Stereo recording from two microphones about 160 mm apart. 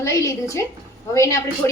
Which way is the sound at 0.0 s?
20° left (ahead or behind).